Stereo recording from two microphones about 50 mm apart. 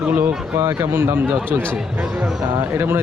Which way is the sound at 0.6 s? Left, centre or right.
Right.